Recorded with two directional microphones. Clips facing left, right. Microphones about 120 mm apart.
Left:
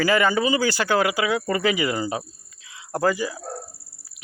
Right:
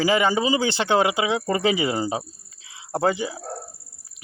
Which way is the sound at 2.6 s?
25° right (ahead or behind).